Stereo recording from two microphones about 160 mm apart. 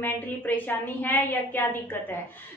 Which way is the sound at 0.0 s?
10° left (ahead or behind).